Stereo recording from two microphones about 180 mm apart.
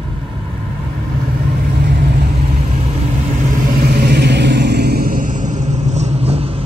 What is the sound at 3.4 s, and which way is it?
Vehicle, 50° right (ahead or behind).